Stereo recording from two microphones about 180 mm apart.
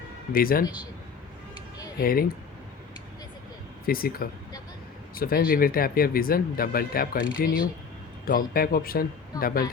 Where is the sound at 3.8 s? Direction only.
55° left (ahead or behind).